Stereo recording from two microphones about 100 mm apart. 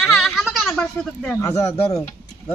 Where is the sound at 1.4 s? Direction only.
30° left (ahead or behind).